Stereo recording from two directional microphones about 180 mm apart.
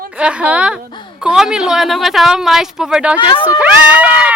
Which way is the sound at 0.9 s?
25° left (ahead or behind).